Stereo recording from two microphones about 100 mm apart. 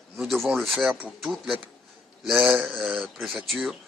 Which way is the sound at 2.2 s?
Centre (ahead or behind).